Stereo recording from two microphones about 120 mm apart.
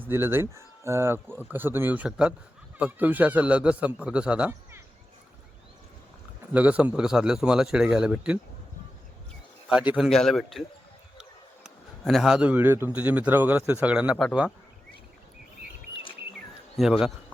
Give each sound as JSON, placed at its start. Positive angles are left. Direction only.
{"t": 0.0, "sound": "speech", "side_deg": -20}
{"t": 6.5, "sound": "speech", "side_deg": -10}
{"t": 9.6, "sound": "a man's voice", "side_deg": -10}
{"t": 10.1, "sound": "a man's voice", "side_deg": 5}
{"t": 12.0, "sound": "speech", "side_deg": 0}
{"t": 16.7, "sound": "a man's voice", "side_deg": 0}